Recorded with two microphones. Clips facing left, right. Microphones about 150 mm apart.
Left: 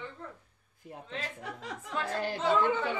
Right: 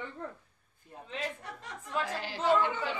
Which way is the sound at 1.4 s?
90° left.